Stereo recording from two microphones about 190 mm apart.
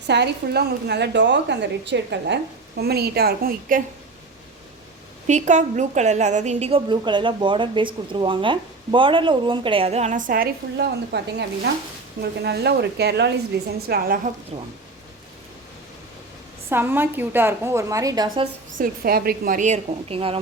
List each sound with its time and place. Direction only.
0.1 s a woman's voice: 60° right (ahead or behind)
5.3 s a woman's voice: 40° right (ahead or behind)
14.5 s a woman's voice: 30° right (ahead or behind)
16.6 s a woman's voice: 10° right (ahead or behind)
18.8 s a woman's voice: 50° right (ahead or behind); by 20.4 s 30° right (ahead or behind)